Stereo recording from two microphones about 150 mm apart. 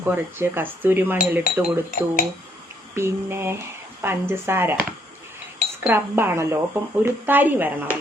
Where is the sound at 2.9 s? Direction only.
15° right (ahead or behind).